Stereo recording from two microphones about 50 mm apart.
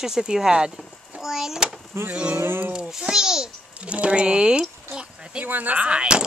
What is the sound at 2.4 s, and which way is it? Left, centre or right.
Speech, right.